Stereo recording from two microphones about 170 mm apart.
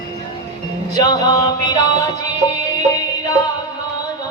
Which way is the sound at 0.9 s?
20° left (ahead or behind).